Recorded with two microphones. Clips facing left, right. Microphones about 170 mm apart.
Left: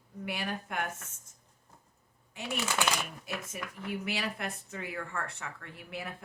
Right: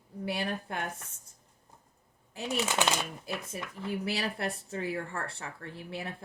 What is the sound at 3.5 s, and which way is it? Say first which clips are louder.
Speech: right 3 dB; 30° right (ahead or behind).